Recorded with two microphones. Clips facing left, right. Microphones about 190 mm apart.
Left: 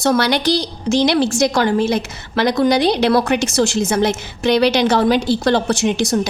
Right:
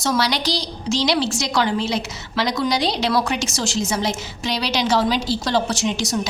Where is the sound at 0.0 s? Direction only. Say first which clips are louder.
Left 6 dB; 55° left (ahead or behind).